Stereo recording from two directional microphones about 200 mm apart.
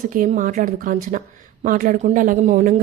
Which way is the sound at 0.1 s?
40° right (ahead or behind).